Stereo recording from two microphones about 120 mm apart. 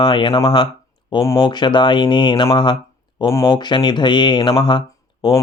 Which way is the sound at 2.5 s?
45° left (ahead or behind).